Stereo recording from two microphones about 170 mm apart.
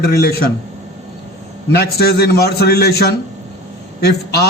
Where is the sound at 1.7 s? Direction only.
65° left (ahead or behind).